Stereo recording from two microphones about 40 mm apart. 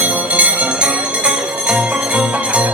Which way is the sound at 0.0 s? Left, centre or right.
Right.